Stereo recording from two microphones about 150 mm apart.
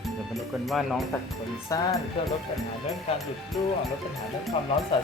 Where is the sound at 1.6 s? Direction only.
20° left (ahead or behind).